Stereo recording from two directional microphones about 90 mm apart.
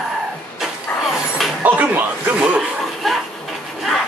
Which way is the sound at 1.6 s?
15° right (ahead or behind).